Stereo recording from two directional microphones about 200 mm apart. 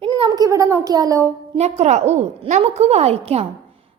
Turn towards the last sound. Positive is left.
turn(degrees=-30)  # may be behind; listen again after turning